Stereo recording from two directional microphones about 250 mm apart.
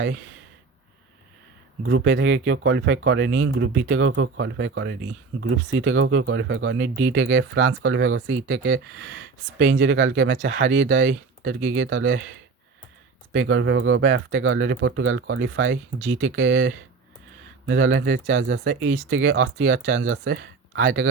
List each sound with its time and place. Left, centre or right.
1.8 s speech: right
13.3 s speech: right